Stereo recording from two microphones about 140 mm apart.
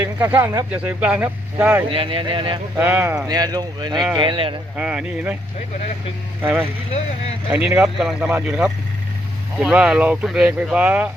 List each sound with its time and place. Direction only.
0.0 s speech: 15° right (ahead or behind)
1.9 s speech: 40° right (ahead or behind)
2.7 s speech: 15° right (ahead or behind)
3.2 s speech: 30° right (ahead or behind)
4.8 s speech: 10° right (ahead or behind)
6.4 s speech: 15° right (ahead or behind)